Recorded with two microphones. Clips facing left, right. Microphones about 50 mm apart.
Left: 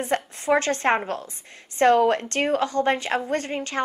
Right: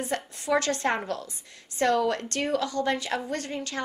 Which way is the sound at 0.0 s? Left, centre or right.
Left.